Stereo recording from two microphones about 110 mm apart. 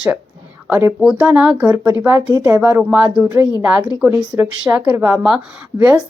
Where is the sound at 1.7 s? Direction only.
25° right (ahead or behind); by 5.6 s 5° right (ahead or behind).